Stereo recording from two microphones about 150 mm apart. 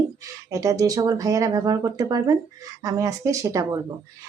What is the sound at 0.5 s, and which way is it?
Speech, 20° right (ahead or behind).